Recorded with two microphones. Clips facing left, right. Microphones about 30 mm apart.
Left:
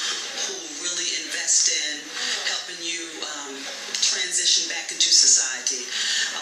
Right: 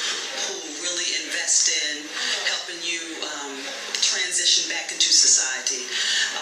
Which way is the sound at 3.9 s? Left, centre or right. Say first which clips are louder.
Right 1 dB; centre.